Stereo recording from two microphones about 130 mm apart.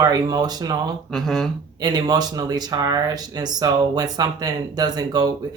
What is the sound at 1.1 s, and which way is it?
Speech, centre (ahead or behind).